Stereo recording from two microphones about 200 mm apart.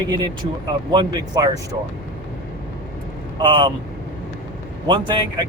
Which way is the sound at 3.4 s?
20° right (ahead or behind).